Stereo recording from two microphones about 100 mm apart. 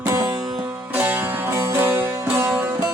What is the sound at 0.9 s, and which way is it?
Music, 20° right (ahead or behind).